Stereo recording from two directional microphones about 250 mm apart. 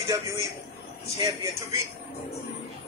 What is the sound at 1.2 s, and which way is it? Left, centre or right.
Speech, centre.